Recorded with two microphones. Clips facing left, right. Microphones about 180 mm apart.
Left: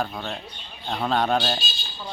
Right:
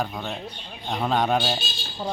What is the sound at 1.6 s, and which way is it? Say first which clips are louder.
Buzzer: right 5 dB; 45° right (ahead or behind).